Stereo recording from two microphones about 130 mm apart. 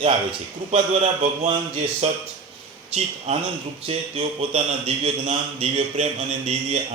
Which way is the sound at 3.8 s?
45° right (ahead or behind).